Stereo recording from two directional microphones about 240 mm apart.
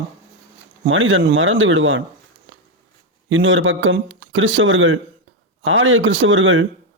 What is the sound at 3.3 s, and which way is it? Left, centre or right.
Speech, right.